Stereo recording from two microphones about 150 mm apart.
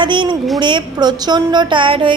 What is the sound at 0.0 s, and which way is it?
A woman's voice, 30° right (ahead or behind).